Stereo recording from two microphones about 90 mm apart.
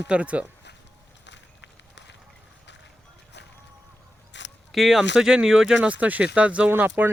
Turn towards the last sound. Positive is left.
turn(degrees=-20)  # may be behind; listen again after turning